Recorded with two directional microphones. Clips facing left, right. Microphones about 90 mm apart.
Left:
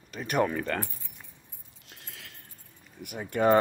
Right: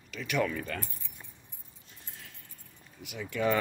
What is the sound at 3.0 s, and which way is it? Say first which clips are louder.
Speech: left 5 dB; 50° left (ahead or behind).